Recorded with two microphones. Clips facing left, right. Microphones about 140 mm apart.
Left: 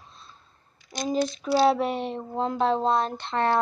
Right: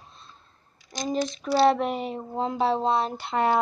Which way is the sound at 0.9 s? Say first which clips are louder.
Left 2 dB; centre (ahead or behind).